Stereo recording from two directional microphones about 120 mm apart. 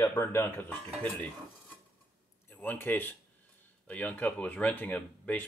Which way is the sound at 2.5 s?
15° left (ahead or behind).